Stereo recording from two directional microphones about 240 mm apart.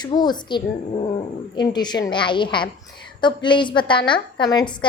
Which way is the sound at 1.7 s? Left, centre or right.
Centre.